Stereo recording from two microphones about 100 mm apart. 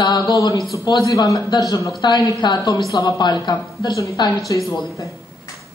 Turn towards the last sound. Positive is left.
turn(degrees=40)  # may be behind; listen again after turning